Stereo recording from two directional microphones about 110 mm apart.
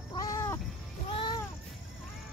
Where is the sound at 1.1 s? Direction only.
45° left (ahead or behind).